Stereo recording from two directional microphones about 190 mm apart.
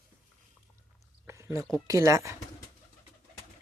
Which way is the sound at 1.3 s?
15° right (ahead or behind).